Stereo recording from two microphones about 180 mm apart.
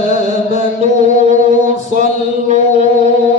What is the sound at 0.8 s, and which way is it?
Music, 45° right (ahead or behind).